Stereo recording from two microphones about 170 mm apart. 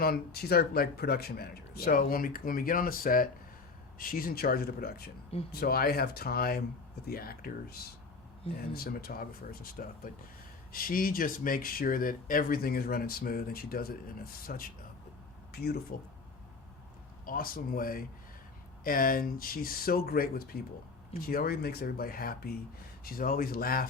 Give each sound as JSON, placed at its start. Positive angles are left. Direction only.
{"t": 0.0, "sound": "speech", "side_deg": 65}
{"t": 17.2, "sound": "speech", "side_deg": 60}